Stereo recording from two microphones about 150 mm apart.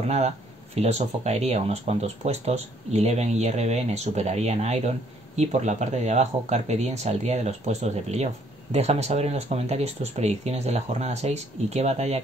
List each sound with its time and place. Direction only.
0.7 s speech: 45° right (ahead or behind)